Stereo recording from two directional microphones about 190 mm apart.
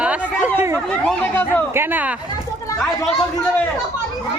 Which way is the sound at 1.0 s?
10° left (ahead or behind).